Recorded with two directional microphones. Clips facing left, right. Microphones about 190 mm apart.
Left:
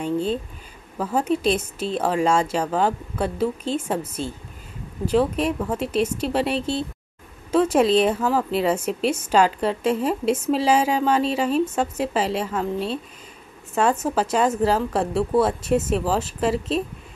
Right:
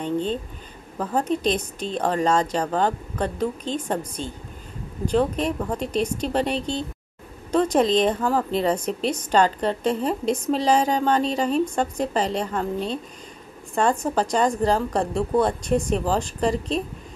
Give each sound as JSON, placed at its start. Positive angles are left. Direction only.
{"t": 0.9, "sound": "a woman's voice", "side_deg": 5}